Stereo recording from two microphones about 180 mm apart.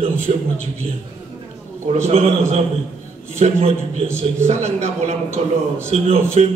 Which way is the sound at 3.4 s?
35° right (ahead or behind).